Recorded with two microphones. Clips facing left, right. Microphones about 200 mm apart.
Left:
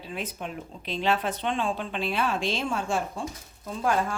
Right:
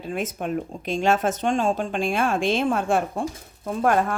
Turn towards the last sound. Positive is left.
turn(degrees=-60)  # may be behind; listen again after turning